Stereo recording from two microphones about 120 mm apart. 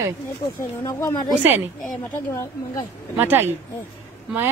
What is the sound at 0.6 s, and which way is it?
Speech, 25° left (ahead or behind).